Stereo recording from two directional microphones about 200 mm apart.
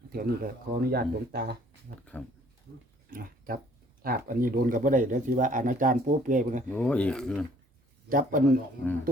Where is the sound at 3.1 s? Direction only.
45° right (ahead or behind).